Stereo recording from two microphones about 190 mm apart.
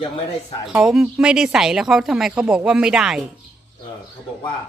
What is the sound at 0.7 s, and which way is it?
Speech, centre (ahead or behind).